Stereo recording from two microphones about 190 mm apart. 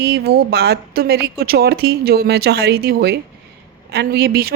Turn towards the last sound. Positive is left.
turn(degrees=-55)  # may be behind; listen again after turning